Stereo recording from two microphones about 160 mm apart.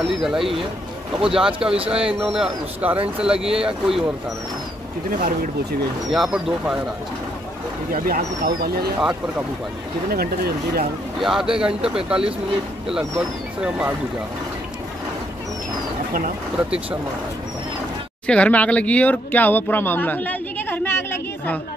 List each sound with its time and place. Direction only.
0.1 s speech: centre (ahead or behind)
6.0 s speech: centre (ahead or behind)
7.9 s speech: 65° right (ahead or behind)
10.1 s speech: 75° right (ahead or behind)
11.1 s speech: centre (ahead or behind)
13.6 s speech: 5° right (ahead or behind)
16.5 s speech: 5° right (ahead or behind)
18.2 s speech: 5° left (ahead or behind)